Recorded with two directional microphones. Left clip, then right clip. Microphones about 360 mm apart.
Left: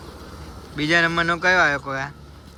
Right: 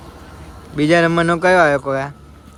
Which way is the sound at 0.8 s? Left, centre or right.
Centre.